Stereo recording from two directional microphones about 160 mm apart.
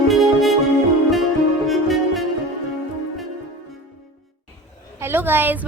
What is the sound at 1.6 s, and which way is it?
Music, centre (ahead or behind).